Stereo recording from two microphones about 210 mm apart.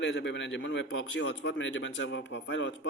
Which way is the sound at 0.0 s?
55° left (ahead or behind).